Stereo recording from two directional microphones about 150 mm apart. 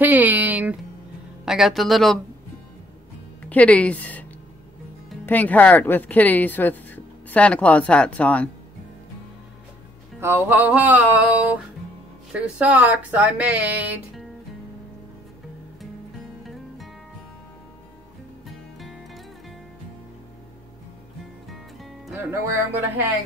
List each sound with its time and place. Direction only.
0.0 s speech: 10° right (ahead or behind)
3.4 s speech: 10° left (ahead or behind)
10.2 s speech: 15° right (ahead or behind)
16.4 s music: centre (ahead or behind)
18.8 s music: centre (ahead or behind)
22.1 s speech: 15° right (ahead or behind)